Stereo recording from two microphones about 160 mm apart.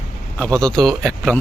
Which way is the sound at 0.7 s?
Centre (ahead or behind).